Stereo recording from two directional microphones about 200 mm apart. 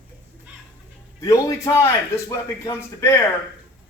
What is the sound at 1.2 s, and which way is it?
A man's voice, 20° left (ahead or behind).